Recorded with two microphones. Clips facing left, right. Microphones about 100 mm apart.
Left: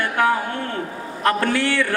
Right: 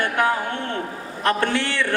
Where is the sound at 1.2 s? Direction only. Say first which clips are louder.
Left 2 dB; 25° right (ahead or behind).